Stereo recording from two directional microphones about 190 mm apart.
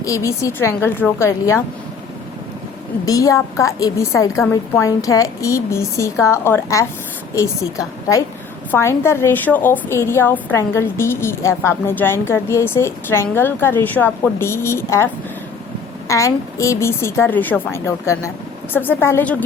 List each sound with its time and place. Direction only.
0.0 s a woman's voice: 15° left (ahead or behind)
3.1 s a woman's voice: 15° left (ahead or behind)